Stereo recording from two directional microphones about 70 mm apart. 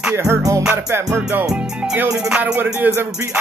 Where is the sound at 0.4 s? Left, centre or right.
Right.